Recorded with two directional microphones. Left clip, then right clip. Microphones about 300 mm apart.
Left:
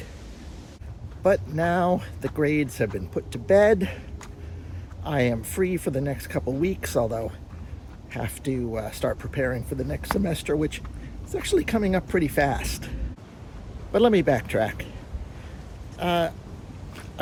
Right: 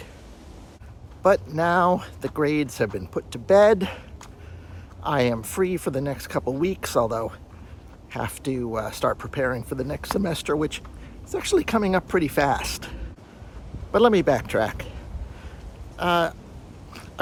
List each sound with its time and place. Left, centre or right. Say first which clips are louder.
1.2 s speech: right 2 dB; centre
5.0 s speech: right 3 dB; centre
16.0 s speech: right 3 dB; centre